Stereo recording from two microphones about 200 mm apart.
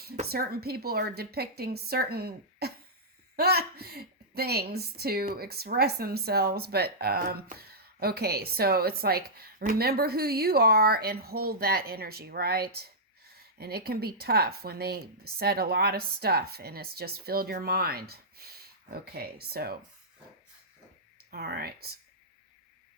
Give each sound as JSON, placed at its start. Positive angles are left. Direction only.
{"t": 0.3, "sound": "a woman's voice", "side_deg": -50}
{"t": 21.2, "sound": "a woman's voice", "side_deg": -50}